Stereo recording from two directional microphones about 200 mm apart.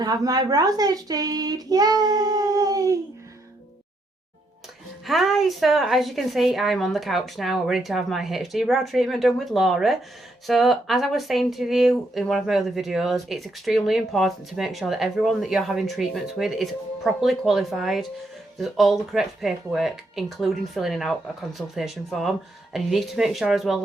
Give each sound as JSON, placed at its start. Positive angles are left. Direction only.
{"t": 0.0, "sound": "speech", "side_deg": -20}
{"t": 5.0, "sound": "speech", "side_deg": 0}